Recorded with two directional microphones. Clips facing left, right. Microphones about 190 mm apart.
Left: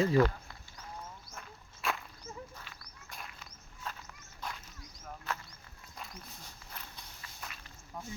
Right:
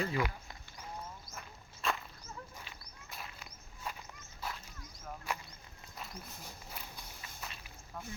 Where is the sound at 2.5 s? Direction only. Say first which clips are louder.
Even; 15° right (ahead or behind).